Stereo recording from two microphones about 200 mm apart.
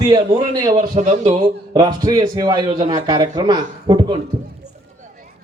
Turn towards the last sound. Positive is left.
turn(degrees=-20)  # may be behind; listen again after turning